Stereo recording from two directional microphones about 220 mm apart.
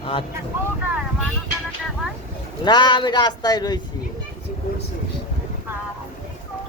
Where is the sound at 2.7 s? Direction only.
20° left (ahead or behind).